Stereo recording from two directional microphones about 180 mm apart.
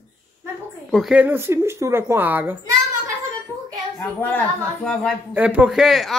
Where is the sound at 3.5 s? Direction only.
20° right (ahead or behind).